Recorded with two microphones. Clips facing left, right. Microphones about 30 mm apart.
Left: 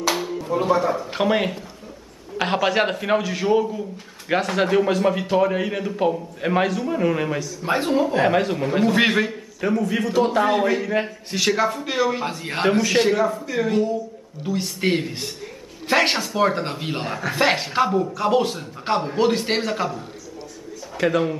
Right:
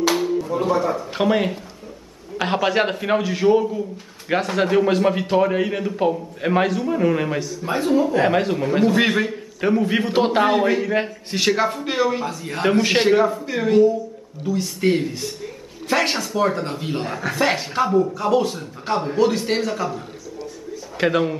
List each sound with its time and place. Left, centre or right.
0.0 s a sound: centre
2.3 s a man's voice: centre
4.8 s a man's voice: centre
7.6 s speech: left
8.2 s a man's voice: centre
9.6 s a man's voice: centre
9.8 s a man's voice: right
10.5 s a man's voice: centre
12.3 s speech: left
12.9 s a man's voice: centre
14.4 s speech: left; by 17.4 s centre
17.4 s speech: centre
21.0 s a man's voice: right